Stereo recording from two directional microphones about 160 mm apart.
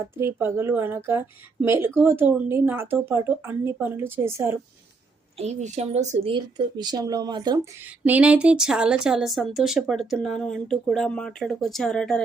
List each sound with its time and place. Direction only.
0.0 s speech: 15° right (ahead or behind)
5.4 s speech: 45° right (ahead or behind); by 7.7 s 25° right (ahead or behind)
8.0 s speech: 10° right (ahead or behind)